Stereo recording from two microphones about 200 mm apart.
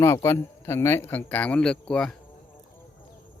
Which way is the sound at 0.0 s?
15° left (ahead or behind).